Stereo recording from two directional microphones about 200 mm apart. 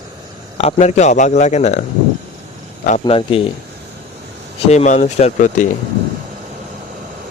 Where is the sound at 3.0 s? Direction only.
25° left (ahead or behind).